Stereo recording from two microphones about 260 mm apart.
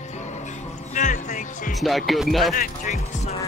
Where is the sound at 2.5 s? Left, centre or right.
Left.